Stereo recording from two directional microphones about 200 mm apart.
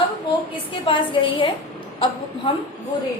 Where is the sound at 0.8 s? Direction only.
25° left (ahead or behind).